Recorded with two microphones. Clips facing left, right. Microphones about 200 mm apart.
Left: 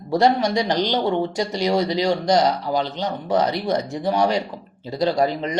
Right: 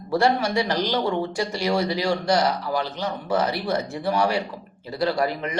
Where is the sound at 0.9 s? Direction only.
25° left (ahead or behind).